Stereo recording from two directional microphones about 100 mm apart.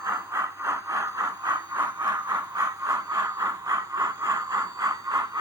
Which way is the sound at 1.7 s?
20° right (ahead or behind).